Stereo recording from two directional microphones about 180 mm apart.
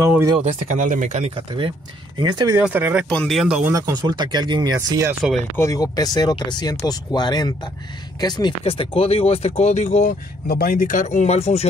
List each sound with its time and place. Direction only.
0.0 s speech: 15° right (ahead or behind)
0.4 s speech: 45° right (ahead or behind)
1.3 s speech: 30° right (ahead or behind)
2.6 s speech: 10° right (ahead or behind)
3.1 s speech: 5° left (ahead or behind)
3.7 s speech: 20° right (ahead or behind)
5.6 s speech: 20° left (ahead or behind); by 10.1 s 40° left (ahead or behind)
10.5 s speech: 55° left (ahead or behind); by 11.6 s 35° left (ahead or behind)